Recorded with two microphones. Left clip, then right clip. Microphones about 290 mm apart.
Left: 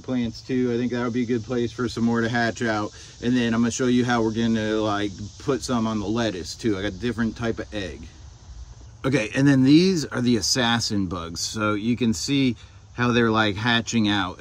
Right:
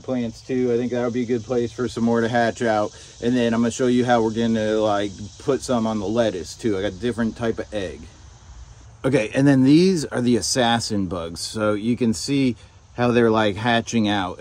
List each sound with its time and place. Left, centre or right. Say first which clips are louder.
0.0 s speech: right 2 dB; centre
9.0 s speech: right 3 dB; centre